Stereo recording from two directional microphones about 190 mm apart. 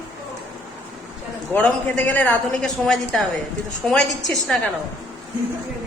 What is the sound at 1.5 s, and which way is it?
A man's voice, 5° left (ahead or behind).